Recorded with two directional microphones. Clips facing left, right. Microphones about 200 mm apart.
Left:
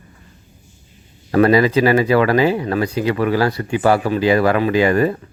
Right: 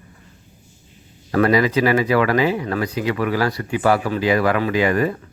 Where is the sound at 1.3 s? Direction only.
30° left (ahead or behind).